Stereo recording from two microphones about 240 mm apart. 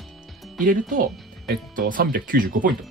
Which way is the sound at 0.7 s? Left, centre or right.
Right.